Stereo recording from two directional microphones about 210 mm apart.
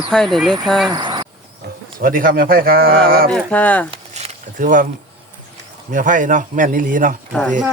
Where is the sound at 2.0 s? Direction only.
40° right (ahead or behind).